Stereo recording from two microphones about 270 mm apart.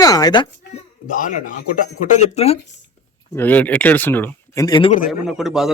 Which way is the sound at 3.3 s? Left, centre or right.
Centre.